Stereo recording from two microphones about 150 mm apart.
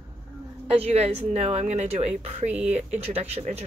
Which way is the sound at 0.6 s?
40° right (ahead or behind).